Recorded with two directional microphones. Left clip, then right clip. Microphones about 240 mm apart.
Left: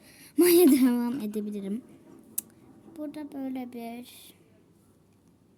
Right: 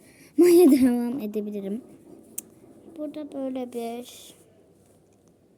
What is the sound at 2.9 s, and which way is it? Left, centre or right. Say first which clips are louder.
A woman's voice: right 4 dB; left.